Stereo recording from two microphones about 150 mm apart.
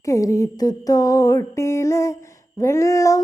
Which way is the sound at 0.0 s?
20° left (ahead or behind).